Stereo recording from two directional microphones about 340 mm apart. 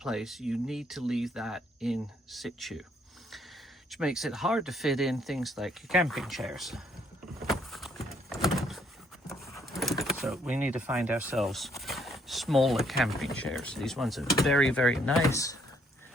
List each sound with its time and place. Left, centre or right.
0.0 s speech: centre
3.8 s speech: centre
7.4 s horse: centre
9.3 s power windows: centre
11.3 s speech: centre